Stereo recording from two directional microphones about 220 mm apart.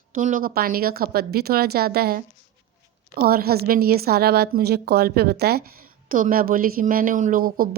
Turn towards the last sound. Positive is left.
turn(degrees=-40)  # may be behind; listen again after turning